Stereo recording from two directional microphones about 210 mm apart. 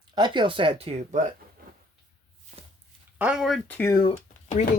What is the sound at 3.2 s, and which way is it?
Speech, 5° right (ahead or behind).